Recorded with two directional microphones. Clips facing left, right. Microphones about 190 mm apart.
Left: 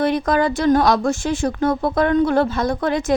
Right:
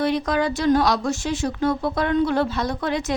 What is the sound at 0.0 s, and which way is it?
A woman's voice, 50° left (ahead or behind).